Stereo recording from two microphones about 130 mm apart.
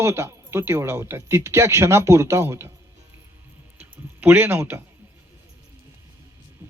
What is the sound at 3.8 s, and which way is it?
Speech, 15° right (ahead or behind).